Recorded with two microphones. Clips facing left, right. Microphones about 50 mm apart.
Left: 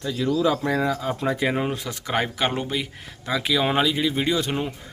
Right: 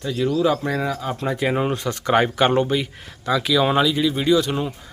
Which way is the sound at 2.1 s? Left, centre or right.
Centre.